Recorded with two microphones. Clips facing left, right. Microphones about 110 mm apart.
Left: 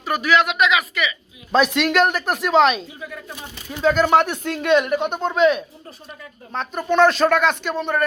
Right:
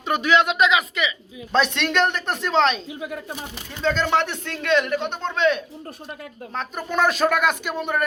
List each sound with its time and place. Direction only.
0.0 s speech: 25° right (ahead or behind)
1.5 s speech: 5° left (ahead or behind)
3.0 s speech: 55° right (ahead or behind)
3.7 s speech: 10° left (ahead or behind); by 8.0 s 10° right (ahead or behind)